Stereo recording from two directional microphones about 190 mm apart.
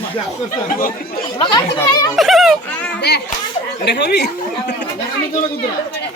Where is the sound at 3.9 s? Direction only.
60° left (ahead or behind).